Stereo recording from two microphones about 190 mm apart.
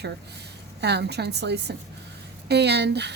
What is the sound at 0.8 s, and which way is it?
Speech, 60° right (ahead or behind).